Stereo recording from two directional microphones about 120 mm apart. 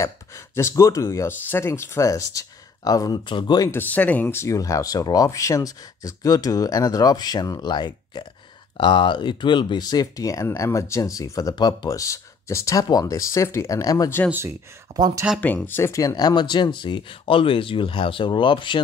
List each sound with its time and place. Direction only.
0.0 s speech: 25° left (ahead or behind); by 3.6 s 40° left (ahead or behind)
3.6 s speech: 15° left (ahead or behind)
15.0 s speech: 35° right (ahead or behind)
15.4 s speech: 15° left (ahead or behind); by 18.8 s 45° left (ahead or behind)